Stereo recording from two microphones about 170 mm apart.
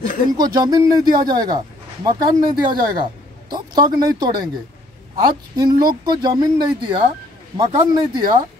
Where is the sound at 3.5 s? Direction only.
25° right (ahead or behind).